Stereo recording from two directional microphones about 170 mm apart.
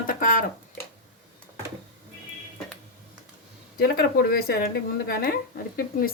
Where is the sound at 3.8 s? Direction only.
65° left (ahead or behind).